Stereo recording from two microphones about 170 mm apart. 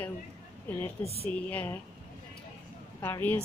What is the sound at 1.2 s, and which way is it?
Speech, 10° left (ahead or behind).